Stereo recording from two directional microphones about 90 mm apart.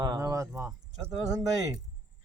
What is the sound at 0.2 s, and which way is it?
Speech, 35° right (ahead or behind).